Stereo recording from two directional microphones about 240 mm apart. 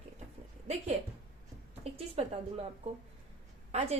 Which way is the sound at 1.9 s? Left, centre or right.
Right.